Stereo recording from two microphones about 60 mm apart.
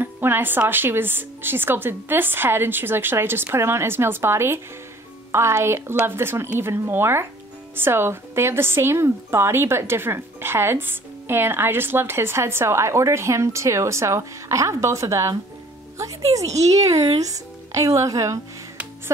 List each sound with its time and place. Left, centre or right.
0.0 s a woman's voice: right